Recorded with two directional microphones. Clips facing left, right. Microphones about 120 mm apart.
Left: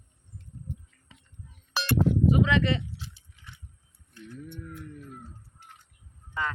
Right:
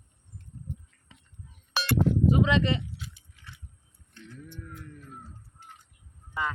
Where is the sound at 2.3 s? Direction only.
25° right (ahead or behind).